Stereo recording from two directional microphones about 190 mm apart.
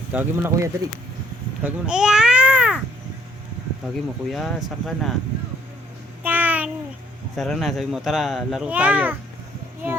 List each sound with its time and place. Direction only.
0.1 s speech: 10° right (ahead or behind)
1.6 s babbling: 5° right (ahead or behind)
4.3 s speech: centre (ahead or behind)
6.2 s child singing: 10° right (ahead or behind)
7.3 s speech: centre (ahead or behind)